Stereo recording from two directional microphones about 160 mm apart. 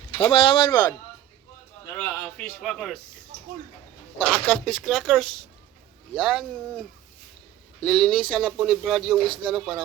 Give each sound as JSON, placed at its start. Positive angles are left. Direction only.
{"t": 0.2, "sound": "speech", "side_deg": 35}
{"t": 2.0, "sound": "speech", "side_deg": 10}
{"t": 4.2, "sound": "speech", "side_deg": 5}